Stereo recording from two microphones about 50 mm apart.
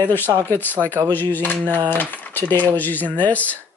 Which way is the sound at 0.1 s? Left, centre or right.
Left.